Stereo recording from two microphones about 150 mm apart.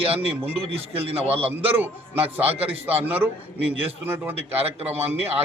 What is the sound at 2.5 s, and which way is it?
Speech, 40° right (ahead or behind).